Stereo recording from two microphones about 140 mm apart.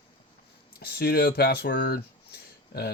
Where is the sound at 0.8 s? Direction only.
90° left.